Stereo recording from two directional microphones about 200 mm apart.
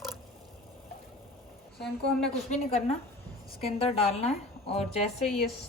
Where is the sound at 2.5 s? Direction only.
35° left (ahead or behind).